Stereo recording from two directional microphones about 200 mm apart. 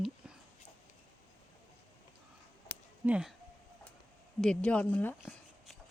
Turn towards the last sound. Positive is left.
turn(degrees=0)  # may be behind; listen again after turning